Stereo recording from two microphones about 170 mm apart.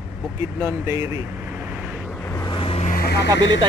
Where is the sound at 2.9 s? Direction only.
65° left (ahead or behind).